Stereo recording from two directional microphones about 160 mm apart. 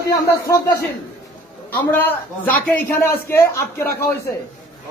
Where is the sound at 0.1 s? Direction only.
20° left (ahead or behind).